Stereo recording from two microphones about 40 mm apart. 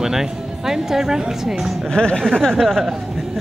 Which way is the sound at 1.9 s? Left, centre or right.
Left.